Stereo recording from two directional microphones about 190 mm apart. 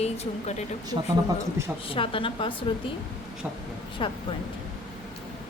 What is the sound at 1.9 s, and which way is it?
Speech, 30° left (ahead or behind).